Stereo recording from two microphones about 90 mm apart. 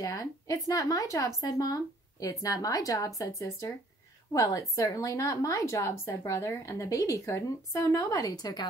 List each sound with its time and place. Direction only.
0.0 s a woman's voice: 40° left (ahead or behind)